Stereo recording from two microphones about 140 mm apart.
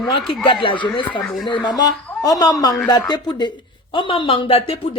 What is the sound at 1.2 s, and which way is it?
Speech, centre (ahead or behind).